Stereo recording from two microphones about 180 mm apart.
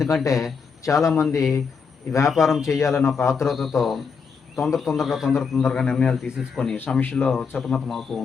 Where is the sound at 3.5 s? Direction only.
Centre (ahead or behind).